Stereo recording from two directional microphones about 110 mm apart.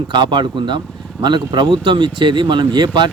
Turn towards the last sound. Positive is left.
turn(degrees=-45)  # may be behind; listen again after turning